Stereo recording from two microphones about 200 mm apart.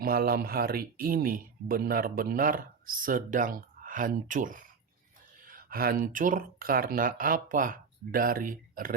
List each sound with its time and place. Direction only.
0.0 s speech: 50° right (ahead or behind)